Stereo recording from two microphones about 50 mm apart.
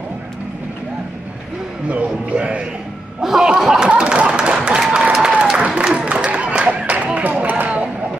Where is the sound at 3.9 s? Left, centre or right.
Right.